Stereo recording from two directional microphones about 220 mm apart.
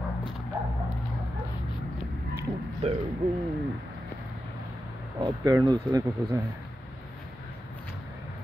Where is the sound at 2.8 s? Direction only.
30° right (ahead or behind).